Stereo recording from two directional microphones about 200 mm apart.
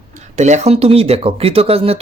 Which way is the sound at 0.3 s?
35° right (ahead or behind).